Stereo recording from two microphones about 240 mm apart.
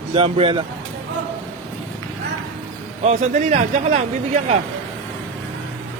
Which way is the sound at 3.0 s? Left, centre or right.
Right.